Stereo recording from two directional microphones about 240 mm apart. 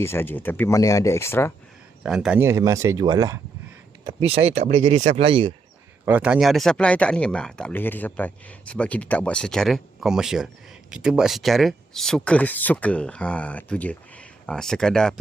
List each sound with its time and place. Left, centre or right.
0.0 s speech: centre
2.0 s speech: centre; by 5.5 s right
6.1 s speech: centre